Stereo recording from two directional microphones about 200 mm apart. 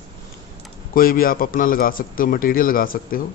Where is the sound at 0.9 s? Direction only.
45° left (ahead or behind).